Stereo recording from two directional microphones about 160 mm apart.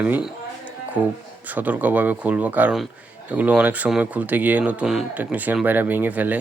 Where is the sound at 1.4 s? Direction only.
10° right (ahead or behind).